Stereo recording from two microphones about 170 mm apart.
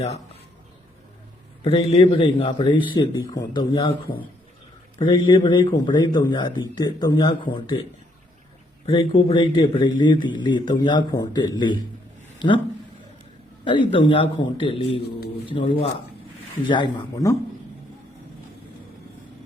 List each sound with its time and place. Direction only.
1.6 s a man's voice: 35° left (ahead or behind)
5.0 s speech: 30° left (ahead or behind)
8.9 s speech: 30° left (ahead or behind)
13.7 s a man's voice: 30° left (ahead or behind)